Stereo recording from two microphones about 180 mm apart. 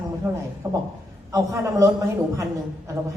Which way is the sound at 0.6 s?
15° right (ahead or behind).